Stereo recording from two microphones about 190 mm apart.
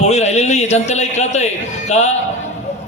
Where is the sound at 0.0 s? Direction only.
35° left (ahead or behind).